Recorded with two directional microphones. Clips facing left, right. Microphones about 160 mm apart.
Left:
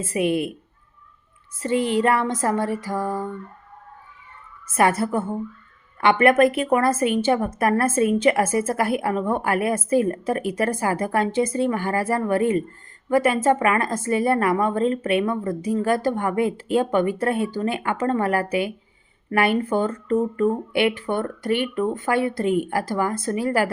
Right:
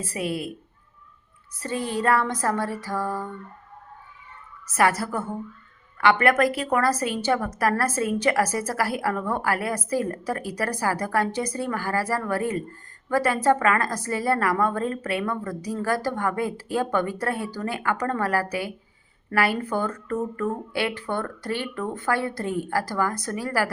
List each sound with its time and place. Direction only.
0.0 s a woman's voice: 20° left (ahead or behind)
1.5 s a woman's voice: 20° left (ahead or behind)
4.8 s a woman's voice: 25° left (ahead or behind)